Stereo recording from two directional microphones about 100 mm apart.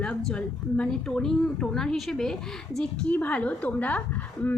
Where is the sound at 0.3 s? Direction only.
5° left (ahead or behind).